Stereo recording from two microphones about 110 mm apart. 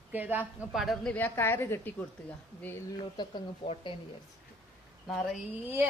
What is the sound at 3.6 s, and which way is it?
Speech, 65° left (ahead or behind).